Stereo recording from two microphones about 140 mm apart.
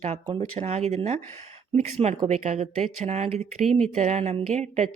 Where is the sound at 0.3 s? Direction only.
50° right (ahead or behind).